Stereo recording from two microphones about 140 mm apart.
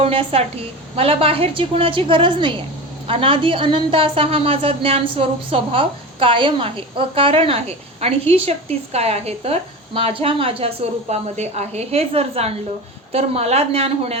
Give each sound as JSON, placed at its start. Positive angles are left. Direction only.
{"t": 0.0, "sound": "a woman's voice", "side_deg": -45}